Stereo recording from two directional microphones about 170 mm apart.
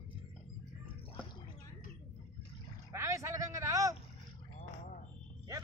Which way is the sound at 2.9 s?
15° right (ahead or behind).